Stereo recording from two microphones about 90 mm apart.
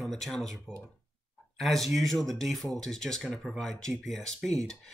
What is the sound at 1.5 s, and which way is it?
Speech, centre (ahead or behind).